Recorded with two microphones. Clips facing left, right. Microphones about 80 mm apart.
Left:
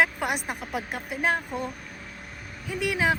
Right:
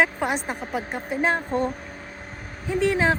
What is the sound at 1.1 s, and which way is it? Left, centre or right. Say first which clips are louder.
Speech: right 3 dB; right.